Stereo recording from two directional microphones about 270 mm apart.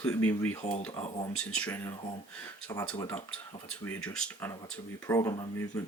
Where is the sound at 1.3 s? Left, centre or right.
Centre.